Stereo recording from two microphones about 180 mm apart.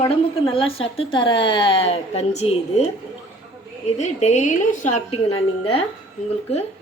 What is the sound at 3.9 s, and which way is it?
A woman's voice, 40° left (ahead or behind).